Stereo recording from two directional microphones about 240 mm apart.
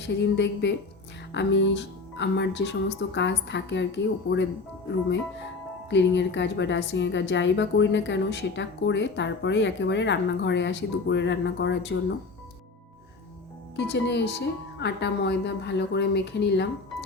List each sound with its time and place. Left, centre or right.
0.0 s a woman's voice: left
5.9 s a woman's voice: left
13.7 s a woman's voice: left